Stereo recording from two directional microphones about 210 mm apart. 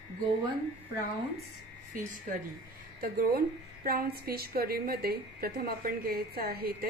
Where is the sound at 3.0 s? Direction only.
45° right (ahead or behind).